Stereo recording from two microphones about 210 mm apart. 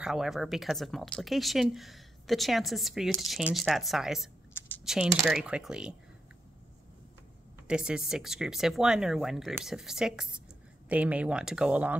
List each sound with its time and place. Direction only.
0.0 s speech: centre (ahead or behind)
4.6 s computer keyboard: 10° left (ahead or behind)
4.8 s speech: centre (ahead or behind)
7.6 s speech: 5° right (ahead or behind)